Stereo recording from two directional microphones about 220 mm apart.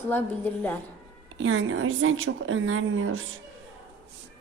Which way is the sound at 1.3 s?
65° right (ahead or behind).